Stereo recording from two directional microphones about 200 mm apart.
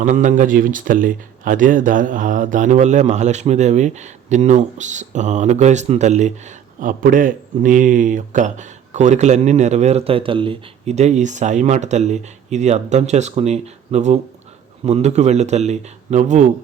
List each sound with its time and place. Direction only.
0.0 s speech: 40° right (ahead or behind)